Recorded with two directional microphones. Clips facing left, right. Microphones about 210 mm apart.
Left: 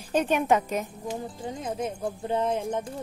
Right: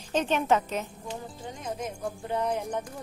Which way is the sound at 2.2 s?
25° left (ahead or behind).